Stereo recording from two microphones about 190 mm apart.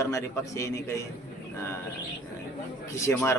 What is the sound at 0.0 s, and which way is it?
Speech, 15° left (ahead or behind).